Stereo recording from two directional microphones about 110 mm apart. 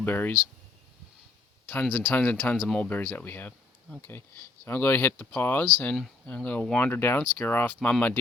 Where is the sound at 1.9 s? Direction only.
15° left (ahead or behind).